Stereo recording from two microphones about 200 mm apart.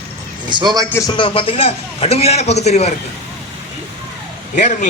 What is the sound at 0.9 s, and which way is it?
A man's voice, 20° left (ahead or behind).